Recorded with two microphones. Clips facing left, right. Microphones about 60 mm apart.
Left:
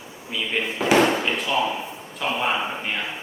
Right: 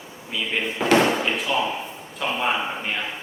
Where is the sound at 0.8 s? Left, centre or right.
Centre.